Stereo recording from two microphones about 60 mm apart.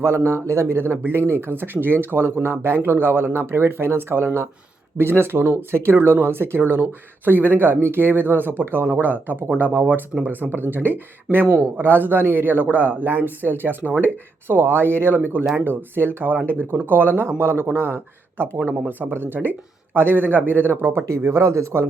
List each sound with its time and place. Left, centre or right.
0.0 s speech: right
21.2 s speech: right